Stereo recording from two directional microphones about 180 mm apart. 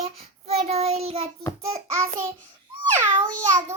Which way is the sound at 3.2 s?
45° right (ahead or behind).